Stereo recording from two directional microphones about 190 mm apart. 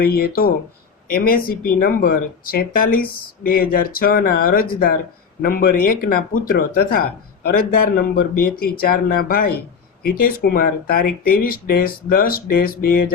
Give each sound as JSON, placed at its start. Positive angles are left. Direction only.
{"t": 0.0, "sound": "speech", "side_deg": 50}